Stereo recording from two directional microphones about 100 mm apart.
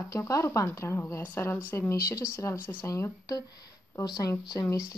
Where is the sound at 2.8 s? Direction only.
35° left (ahead or behind).